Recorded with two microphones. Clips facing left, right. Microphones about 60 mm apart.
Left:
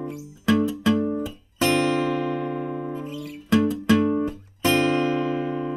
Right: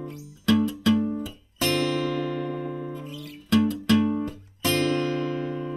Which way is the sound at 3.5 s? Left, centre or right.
Centre.